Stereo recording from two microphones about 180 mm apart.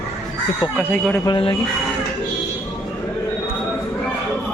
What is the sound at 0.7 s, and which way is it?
Speech, 5° left (ahead or behind).